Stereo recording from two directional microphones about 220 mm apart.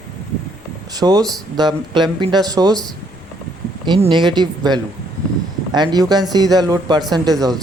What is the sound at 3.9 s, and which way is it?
Speech, 20° right (ahead or behind).